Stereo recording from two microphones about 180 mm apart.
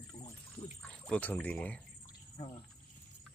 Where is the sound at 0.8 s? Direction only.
5° left (ahead or behind).